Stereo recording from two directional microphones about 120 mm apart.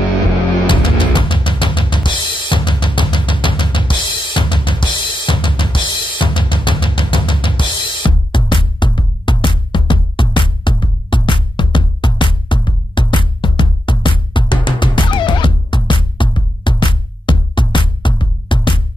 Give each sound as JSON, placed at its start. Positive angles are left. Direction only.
{"t": 0.7, "sound": "drum kit", "side_deg": 40}